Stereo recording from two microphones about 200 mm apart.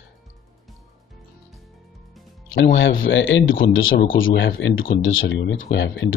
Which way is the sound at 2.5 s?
70° left (ahead or behind).